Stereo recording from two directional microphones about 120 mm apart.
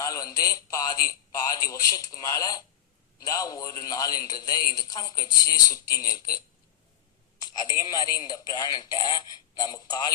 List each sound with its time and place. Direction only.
0.0 s a man's voice: 30° left (ahead or behind)
7.4 s a man's voice: 35° left (ahead or behind)